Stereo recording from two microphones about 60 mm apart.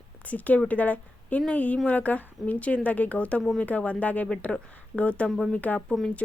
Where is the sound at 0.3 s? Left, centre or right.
Left.